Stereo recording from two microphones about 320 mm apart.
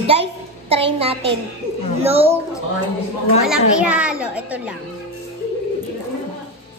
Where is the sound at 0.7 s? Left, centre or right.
Centre.